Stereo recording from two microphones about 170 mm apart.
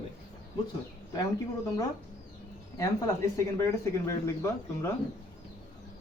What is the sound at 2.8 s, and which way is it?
Speech, 15° left (ahead or behind).